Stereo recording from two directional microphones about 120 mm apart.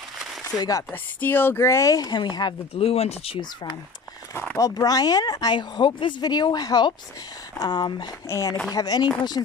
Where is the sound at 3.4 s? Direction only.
35° left (ahead or behind).